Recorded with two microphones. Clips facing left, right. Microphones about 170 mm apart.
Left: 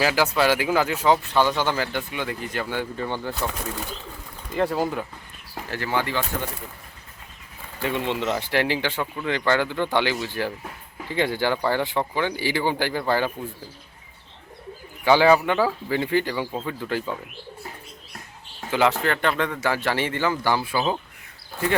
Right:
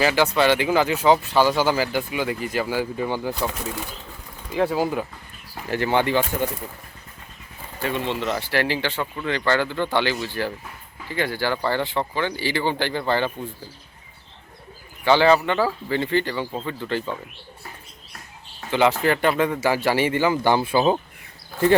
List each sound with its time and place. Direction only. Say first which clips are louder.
0.0 s speech: right 2 dB; 5° left (ahead or behind)
4.5 s speech: right 2 dB; centre (ahead or behind)
5.7 s speech: right 5 dB; 20° right (ahead or behind)
7.8 s speech: even; 15° left (ahead or behind)
15.0 s speech: even; 10° left (ahead or behind)
18.7 s speech: right 2 dB; centre (ahead or behind); by 20.8 s 20° right (ahead or behind)